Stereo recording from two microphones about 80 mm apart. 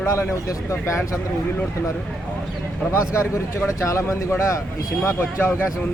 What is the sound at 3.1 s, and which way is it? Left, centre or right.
Speech, left.